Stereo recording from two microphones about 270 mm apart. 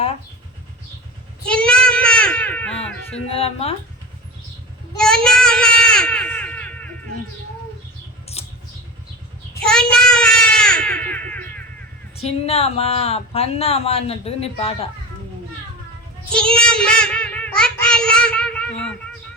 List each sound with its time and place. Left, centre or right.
1.5 s child singing: centre
3.2 s speech: left
4.9 s child singing: centre
8.4 s vehicle: left
9.6 s child singing: centre
12.1 s speech: left
16.3 s child singing: centre